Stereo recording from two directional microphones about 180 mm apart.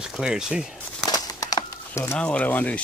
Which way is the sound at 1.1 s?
20° left (ahead or behind).